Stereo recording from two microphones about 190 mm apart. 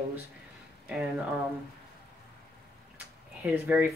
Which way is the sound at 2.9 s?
10° right (ahead or behind).